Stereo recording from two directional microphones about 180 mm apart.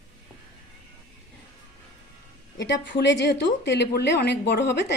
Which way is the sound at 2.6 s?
75° left (ahead or behind).